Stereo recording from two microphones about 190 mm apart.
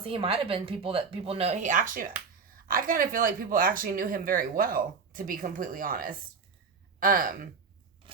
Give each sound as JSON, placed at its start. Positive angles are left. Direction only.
{"t": 0.0, "sound": "speech", "side_deg": -30}
{"t": 8.0, "sound": "vehicle", "side_deg": -25}